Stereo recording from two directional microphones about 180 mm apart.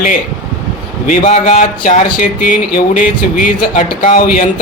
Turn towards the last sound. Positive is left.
turn(degrees=50)  # may be behind; listen again after turning